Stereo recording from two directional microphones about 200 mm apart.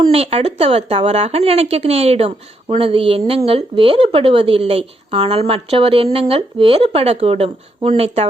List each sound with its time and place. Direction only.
0.0 s speech: 30° right (ahead or behind)